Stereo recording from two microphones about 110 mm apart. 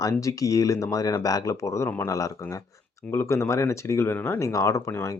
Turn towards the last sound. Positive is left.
turn(degrees=25)  # may be behind; listen again after turning